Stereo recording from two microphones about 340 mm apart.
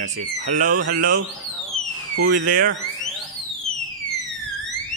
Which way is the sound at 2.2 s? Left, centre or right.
Right.